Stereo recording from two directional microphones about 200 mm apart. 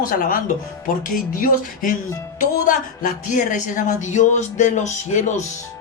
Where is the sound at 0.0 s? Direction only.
45° left (ahead or behind).